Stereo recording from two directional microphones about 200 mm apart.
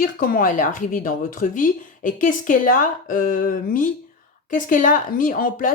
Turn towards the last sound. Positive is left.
turn(degrees=45)  # may be behind; listen again after turning